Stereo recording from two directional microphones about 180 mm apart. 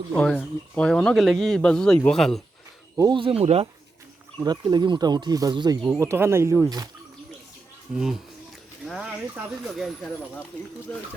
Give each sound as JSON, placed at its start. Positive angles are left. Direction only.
{"t": 0.2, "sound": "speech", "side_deg": 5}
{"t": 2.9, "sound": "speech", "side_deg": -20}
{"t": 4.4, "sound": "speech", "side_deg": -25}
{"t": 7.9, "sound": "speech", "side_deg": 0}
{"t": 8.8, "sound": "a sound", "side_deg": 0}
{"t": 9.7, "sound": "speech", "side_deg": 0}